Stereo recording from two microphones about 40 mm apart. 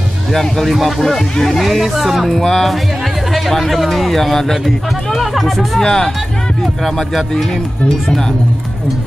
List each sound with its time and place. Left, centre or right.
0.3 s speech: centre
1.6 s speech: centre
2.2 s speech: centre
5.8 s speech: centre
6.6 s speech: centre